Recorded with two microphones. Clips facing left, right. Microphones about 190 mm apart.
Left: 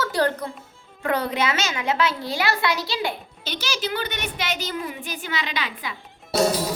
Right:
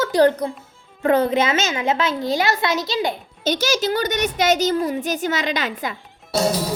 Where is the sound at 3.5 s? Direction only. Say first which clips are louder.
Right 8 dB; 45° right (ahead or behind).